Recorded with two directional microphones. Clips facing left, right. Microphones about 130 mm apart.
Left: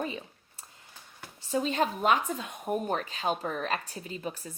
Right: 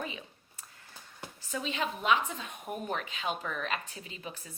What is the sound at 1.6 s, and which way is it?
Speech, 40° left (ahead or behind).